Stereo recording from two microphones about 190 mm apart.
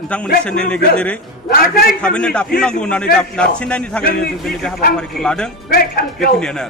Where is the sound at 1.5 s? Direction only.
50° left (ahead or behind).